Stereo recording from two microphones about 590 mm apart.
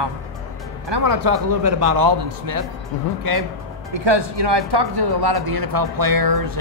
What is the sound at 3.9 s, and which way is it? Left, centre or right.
Speech, right.